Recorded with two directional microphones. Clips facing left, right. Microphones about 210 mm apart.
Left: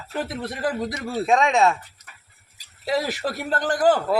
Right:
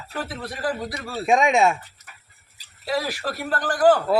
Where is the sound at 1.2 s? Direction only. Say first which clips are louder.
Right 1 dB; 15° right (ahead or behind).